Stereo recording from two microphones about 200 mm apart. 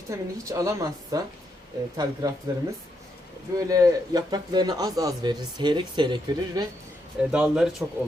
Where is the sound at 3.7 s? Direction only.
20° right (ahead or behind).